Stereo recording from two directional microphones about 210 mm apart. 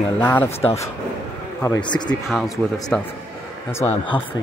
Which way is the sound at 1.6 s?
15° left (ahead or behind).